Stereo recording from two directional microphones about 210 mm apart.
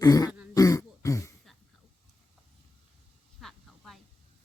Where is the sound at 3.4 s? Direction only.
Centre (ahead or behind).